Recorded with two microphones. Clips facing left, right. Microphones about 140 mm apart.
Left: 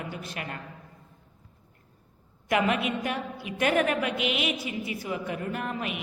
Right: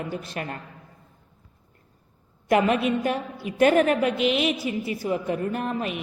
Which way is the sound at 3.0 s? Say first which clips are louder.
Right 5 dB; 35° right (ahead or behind).